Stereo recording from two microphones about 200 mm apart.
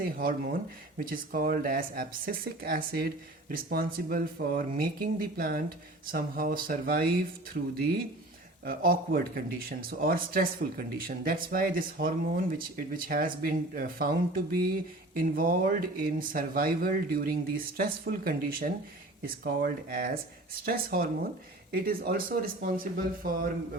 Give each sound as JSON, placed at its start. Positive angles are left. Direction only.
{"t": 0.0, "sound": "speech", "side_deg": -45}
{"t": 8.6, "sound": "speech", "side_deg": -45}